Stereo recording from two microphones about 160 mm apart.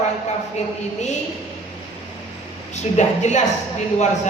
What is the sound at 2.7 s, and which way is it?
Speech, 45° left (ahead or behind).